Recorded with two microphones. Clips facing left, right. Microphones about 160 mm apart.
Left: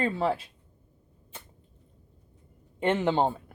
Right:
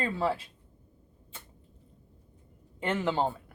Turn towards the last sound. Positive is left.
turn(degrees=25)  # may be behind; listen again after turning